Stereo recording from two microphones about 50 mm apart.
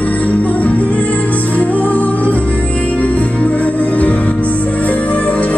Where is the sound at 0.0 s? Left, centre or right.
Left.